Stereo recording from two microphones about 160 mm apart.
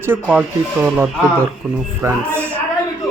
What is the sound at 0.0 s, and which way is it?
Speech, 10° right (ahead or behind).